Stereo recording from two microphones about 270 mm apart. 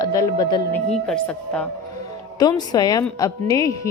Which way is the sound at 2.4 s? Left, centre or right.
Centre.